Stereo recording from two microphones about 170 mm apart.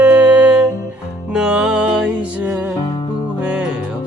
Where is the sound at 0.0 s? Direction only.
5° right (ahead or behind).